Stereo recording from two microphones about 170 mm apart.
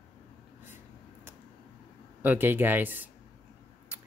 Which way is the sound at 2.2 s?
10° right (ahead or behind).